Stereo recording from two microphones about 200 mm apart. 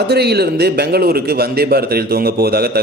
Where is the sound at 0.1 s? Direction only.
55° right (ahead or behind).